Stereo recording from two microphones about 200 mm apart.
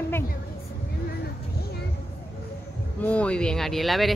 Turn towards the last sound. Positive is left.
turn(degrees=0)  # may be behind; listen again after turning